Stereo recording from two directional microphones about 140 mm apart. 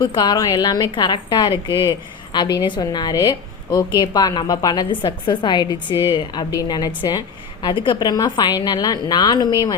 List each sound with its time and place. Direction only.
0.0 s a woman's voice: 30° left (ahead or behind)